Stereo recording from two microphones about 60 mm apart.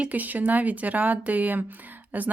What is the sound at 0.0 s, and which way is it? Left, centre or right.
A woman's voice, right.